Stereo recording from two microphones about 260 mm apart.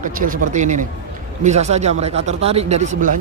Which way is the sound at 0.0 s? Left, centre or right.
Right.